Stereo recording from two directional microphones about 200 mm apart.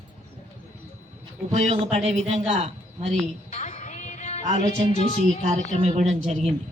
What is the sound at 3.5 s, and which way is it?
Music, 35° left (ahead or behind).